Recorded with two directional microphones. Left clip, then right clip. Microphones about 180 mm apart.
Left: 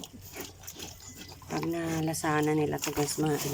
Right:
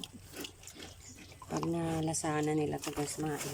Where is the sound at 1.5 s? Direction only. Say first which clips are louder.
Left 3 dB; centre (ahead or behind).